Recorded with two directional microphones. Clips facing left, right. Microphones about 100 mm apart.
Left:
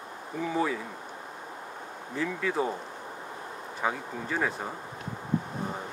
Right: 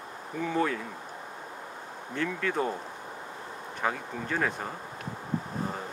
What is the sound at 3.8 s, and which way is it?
Speech, 5° left (ahead or behind).